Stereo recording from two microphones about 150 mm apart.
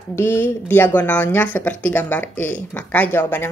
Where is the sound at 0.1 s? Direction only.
15° left (ahead or behind).